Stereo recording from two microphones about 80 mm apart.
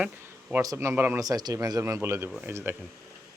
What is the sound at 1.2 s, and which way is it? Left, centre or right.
Speech, right.